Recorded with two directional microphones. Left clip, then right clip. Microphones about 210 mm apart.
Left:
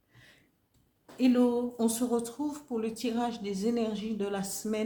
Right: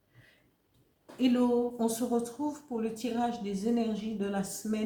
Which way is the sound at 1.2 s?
40° left (ahead or behind).